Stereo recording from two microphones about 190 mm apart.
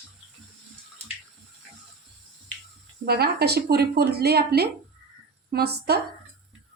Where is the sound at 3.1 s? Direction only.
55° right (ahead or behind).